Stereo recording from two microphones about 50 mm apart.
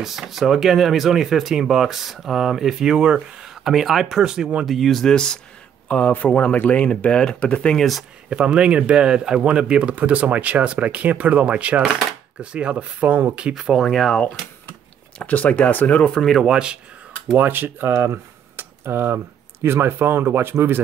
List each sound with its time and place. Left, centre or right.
0.0 s speech: centre
4.2 s speech: centre
4.6 s speech: centre
5.9 s speech: left
7.7 s speech: centre
8.3 s speech: centre
13.6 s speech: centre
15.1 s speech: left
16.2 s speech: centre
16.4 s speech: centre
17.4 s speech: right
17.9 s speech: right